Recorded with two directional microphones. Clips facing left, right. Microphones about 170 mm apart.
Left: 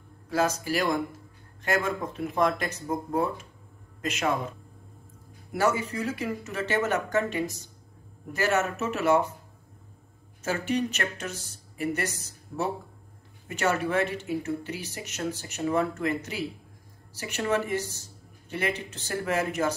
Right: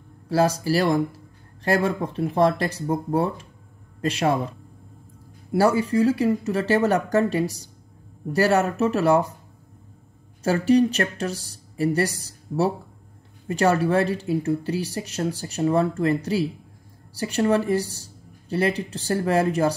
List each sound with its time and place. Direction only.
0.3 s speech: 35° right (ahead or behind)
10.4 s speech: 35° right (ahead or behind)